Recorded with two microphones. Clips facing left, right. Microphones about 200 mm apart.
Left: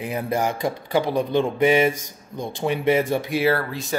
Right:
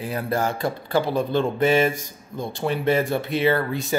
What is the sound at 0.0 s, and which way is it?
Speech, 20° left (ahead or behind).